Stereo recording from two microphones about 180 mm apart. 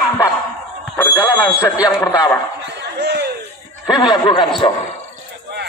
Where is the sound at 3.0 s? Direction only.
65° right (ahead or behind).